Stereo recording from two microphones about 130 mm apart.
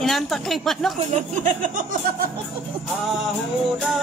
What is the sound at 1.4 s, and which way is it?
Speech, 90° right.